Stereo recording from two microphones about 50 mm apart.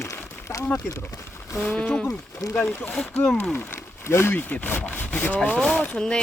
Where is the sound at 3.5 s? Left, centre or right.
Left.